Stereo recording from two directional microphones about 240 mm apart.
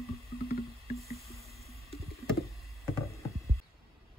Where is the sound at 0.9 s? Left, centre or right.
Centre.